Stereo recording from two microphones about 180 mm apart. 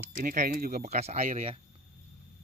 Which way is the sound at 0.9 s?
35° right (ahead or behind).